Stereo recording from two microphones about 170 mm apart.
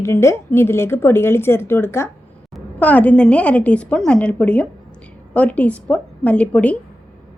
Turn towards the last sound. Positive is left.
turn(degrees=10)  # may be behind; listen again after turning